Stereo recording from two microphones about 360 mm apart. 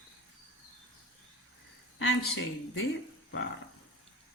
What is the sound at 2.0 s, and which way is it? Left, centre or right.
Speech, left.